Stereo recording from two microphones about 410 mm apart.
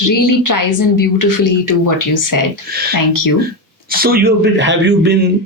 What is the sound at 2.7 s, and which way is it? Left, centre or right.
Speech, right.